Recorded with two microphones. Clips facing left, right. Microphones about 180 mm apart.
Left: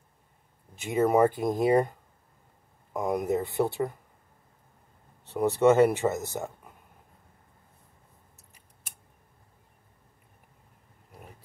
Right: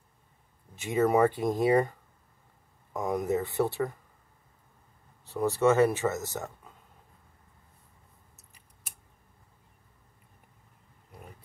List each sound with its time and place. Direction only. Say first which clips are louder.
0.9 s speech: left 1 dB; 10° left (ahead or behind)
5.3 s speech: left 3 dB; 20° left (ahead or behind)